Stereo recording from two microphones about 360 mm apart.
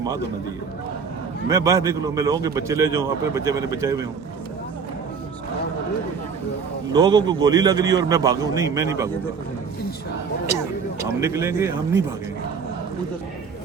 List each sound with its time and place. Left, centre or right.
1.5 s a man's voice: centre
6.9 s a man's voice: centre
11.2 s a man's voice: centre